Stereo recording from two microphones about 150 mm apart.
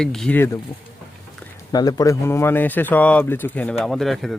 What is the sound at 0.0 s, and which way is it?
Speech, 5° left (ahead or behind).